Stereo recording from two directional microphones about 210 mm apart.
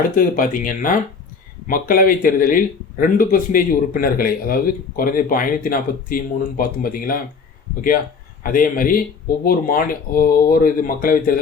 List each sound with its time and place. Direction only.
0.2 s speech: 40° left (ahead or behind)